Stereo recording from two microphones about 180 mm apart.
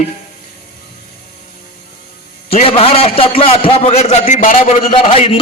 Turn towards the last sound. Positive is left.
turn(degrees=30)  # may be behind; listen again after turning